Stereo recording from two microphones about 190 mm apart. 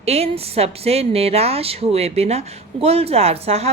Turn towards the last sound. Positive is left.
turn(degrees=-35)  # may be behind; listen again after turning